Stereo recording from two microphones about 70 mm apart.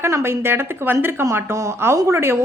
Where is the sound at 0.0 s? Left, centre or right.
Right.